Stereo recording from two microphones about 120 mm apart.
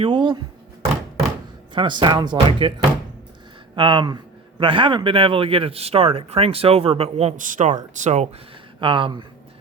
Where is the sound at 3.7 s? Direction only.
40° right (ahead or behind); by 7.7 s 90° right.